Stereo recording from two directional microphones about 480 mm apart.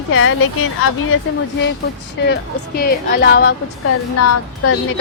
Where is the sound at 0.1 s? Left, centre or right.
Left.